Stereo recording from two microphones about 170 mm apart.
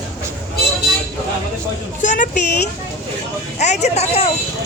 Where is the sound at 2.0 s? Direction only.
45° left (ahead or behind).